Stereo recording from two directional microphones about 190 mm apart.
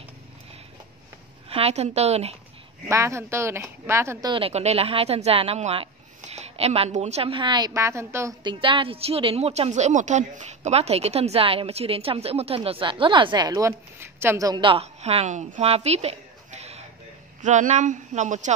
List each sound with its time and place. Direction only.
1.5 s a woman's voice: 35° right (ahead or behind)
2.9 s speech: 15° right (ahead or behind)
4.3 s a woman's voice: 30° right (ahead or behind)